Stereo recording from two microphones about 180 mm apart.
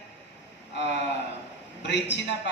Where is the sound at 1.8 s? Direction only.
75° left (ahead or behind).